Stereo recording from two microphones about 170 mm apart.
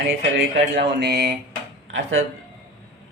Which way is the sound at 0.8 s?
75° right (ahead or behind).